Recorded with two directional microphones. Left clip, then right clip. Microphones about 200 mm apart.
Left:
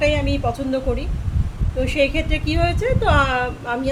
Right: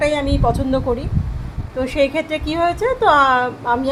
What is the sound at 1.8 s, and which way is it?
A woman's voice, 15° right (ahead or behind).